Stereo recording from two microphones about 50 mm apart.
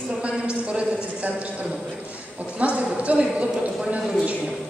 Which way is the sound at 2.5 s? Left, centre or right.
Right.